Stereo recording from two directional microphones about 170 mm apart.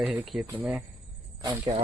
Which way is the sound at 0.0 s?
10° right (ahead or behind).